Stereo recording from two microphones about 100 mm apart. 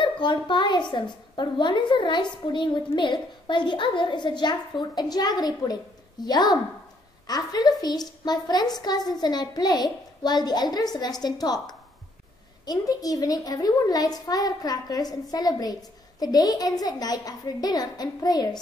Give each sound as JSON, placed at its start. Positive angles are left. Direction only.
{"t": 0.0, "sound": "a child's voice", "side_deg": 50}